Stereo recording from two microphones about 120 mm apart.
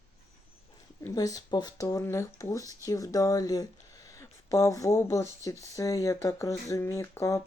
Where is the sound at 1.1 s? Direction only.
30° left (ahead or behind).